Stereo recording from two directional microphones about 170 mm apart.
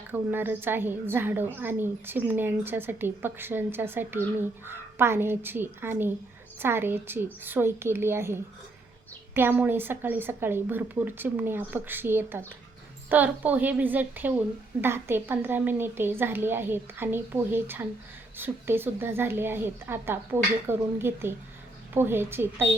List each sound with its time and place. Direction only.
0.1 s a woman's voice: 10° right (ahead or behind)